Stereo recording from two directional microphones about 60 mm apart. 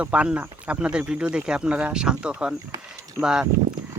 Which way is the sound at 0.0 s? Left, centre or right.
Centre.